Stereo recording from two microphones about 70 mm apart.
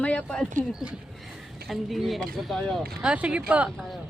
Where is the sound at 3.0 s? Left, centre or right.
Centre.